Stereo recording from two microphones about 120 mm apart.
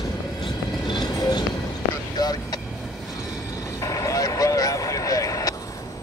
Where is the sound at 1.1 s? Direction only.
35° left (ahead or behind).